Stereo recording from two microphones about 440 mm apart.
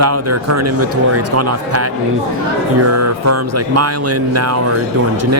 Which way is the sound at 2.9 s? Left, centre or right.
Right.